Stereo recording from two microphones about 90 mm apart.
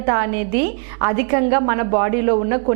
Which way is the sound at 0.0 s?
15° right (ahead or behind).